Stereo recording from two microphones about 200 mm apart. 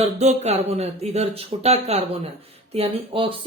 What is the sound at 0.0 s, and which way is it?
Speech, 35° right (ahead or behind).